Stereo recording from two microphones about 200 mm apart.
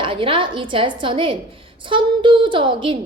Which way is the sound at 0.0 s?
25° right (ahead or behind).